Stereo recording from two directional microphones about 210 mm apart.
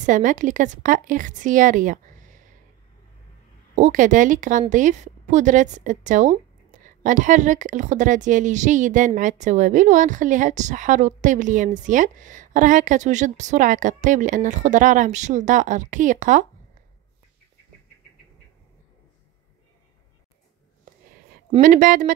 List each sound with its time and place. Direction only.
0.0 s a woman's voice: 35° right (ahead or behind)
3.7 s a woman's voice: 35° right (ahead or behind)
21.5 s a woman's voice: 40° right (ahead or behind)